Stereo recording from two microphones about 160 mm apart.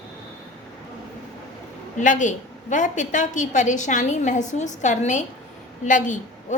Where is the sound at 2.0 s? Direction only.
50° left (ahead or behind).